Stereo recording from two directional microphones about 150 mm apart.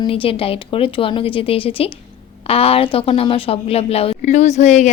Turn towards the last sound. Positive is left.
turn(degrees=50)  # may be behind; listen again after turning